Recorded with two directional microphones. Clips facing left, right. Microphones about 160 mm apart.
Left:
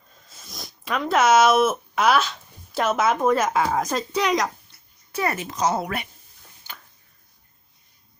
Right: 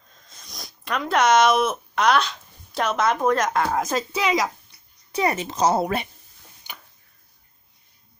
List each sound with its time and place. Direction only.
0.3 s speech: centre (ahead or behind)
5.1 s speech: 20° right (ahead or behind)
6.7 s a sound: 15° right (ahead or behind)